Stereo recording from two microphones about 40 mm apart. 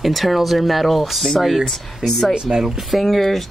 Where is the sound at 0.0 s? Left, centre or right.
Centre.